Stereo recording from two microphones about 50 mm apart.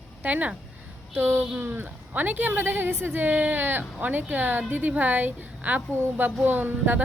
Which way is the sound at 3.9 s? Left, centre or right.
Right.